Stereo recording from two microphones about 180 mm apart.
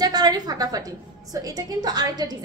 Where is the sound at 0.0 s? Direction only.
20° right (ahead or behind).